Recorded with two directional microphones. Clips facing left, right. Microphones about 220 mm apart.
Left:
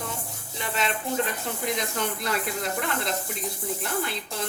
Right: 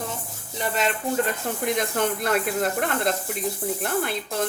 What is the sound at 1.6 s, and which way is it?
Speech, 55° right (ahead or behind).